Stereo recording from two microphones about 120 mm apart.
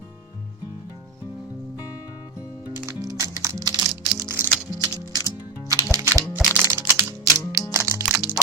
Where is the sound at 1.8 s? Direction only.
30° left (ahead or behind).